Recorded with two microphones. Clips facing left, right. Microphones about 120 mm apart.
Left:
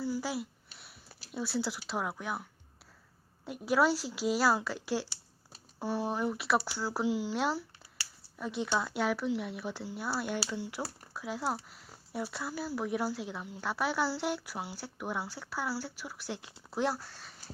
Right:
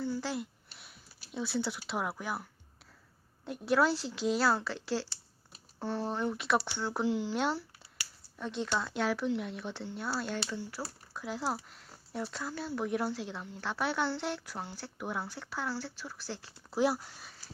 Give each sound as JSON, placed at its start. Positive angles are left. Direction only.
{"t": 0.0, "sound": "a sound", "side_deg": 10}
{"t": 3.4, "sound": "speech", "side_deg": 5}
{"t": 11.1, "sound": "speech", "side_deg": 0}
{"t": 16.7, "sound": "speech", "side_deg": -5}
{"t": 17.0, "sound": "speech", "side_deg": -15}